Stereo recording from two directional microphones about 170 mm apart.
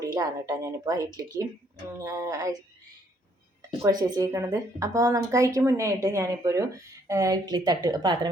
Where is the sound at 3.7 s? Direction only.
25° right (ahead or behind).